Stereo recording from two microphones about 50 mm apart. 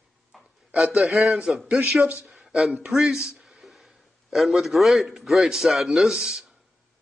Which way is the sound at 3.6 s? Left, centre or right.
Centre.